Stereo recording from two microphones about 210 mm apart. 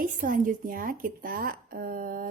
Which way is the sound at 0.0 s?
40° right (ahead or behind).